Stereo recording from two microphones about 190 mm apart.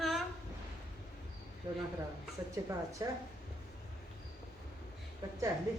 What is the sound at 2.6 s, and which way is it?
Speech, 15° right (ahead or behind).